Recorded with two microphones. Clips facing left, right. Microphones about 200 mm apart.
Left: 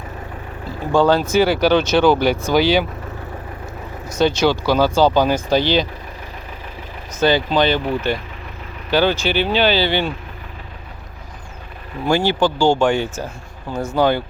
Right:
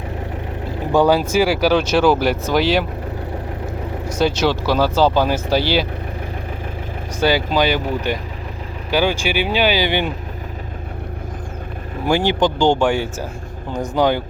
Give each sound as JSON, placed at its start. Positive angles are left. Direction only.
{"t": 0.9, "sound": "speech", "side_deg": -10}
{"t": 4.1, "sound": "speech", "side_deg": -5}
{"t": 7.2, "sound": "speech", "side_deg": -10}
{"t": 12.0, "sound": "speech", "side_deg": -15}